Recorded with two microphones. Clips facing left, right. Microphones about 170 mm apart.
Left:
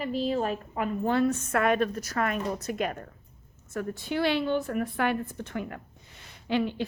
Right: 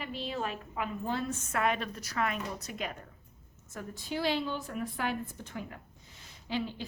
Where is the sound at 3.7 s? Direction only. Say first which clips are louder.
Left 7 dB; 65° left (ahead or behind).